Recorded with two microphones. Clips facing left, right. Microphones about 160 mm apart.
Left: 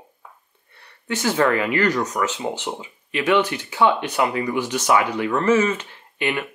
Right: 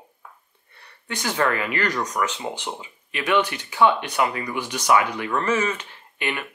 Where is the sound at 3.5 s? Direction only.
10° left (ahead or behind).